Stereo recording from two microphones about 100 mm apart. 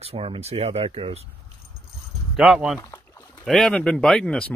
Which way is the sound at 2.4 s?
10° right (ahead or behind).